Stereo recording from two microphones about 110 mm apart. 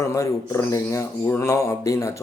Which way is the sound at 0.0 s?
25° left (ahead or behind).